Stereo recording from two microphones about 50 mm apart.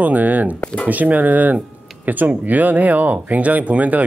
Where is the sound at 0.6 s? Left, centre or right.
Left.